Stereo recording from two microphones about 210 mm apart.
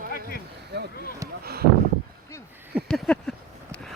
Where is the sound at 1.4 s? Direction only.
50° right (ahead or behind).